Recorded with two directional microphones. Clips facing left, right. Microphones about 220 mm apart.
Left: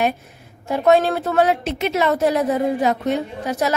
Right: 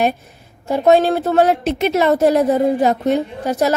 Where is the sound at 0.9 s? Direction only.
35° right (ahead or behind).